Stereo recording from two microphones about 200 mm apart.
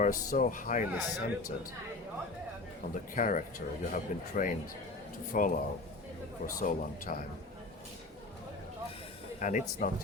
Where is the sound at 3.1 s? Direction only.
40° left (ahead or behind).